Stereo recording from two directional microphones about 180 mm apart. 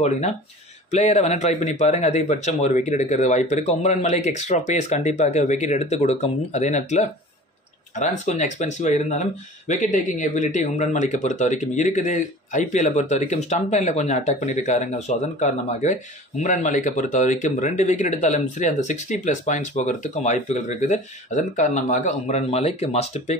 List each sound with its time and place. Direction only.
0.9 s speech: 40° left (ahead or behind)